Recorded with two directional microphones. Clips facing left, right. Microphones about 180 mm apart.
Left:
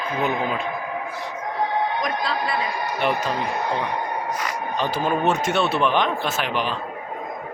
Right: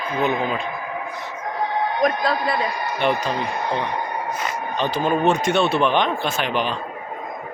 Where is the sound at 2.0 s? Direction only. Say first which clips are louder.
Right 5 dB; 45° right (ahead or behind).